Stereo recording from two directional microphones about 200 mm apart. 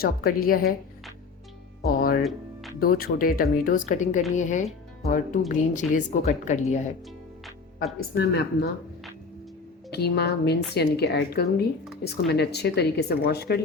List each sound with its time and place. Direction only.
0.0 s speech: 50° left (ahead or behind)
1.9 s speech: 45° left (ahead or behind)
2.2 s music: centre (ahead or behind)
2.8 s a woman's voice: 45° left (ahead or behind)
8.1 s speech: 50° left (ahead or behind)
9.9 s speech: 55° left (ahead or behind)